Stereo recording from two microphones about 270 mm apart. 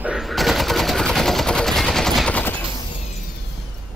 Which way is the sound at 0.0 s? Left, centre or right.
Centre.